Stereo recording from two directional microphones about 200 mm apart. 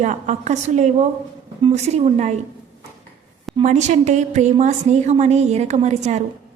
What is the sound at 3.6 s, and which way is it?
A woman's voice, 35° right (ahead or behind).